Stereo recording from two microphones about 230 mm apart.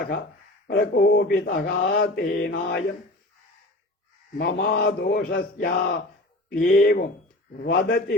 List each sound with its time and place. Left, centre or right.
0.7 s mantra: left
4.4 s mantra: left